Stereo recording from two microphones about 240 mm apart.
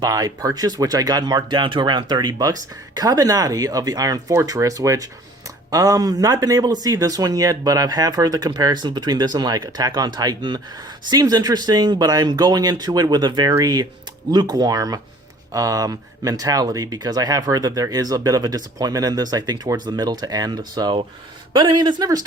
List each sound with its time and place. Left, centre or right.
0.0 s speech: centre